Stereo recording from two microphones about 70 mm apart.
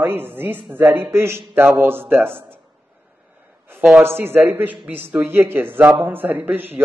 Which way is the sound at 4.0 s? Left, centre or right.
Right.